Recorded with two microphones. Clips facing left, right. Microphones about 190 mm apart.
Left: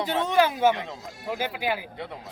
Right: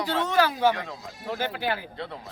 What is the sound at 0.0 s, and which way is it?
Speech, 20° left (ahead or behind).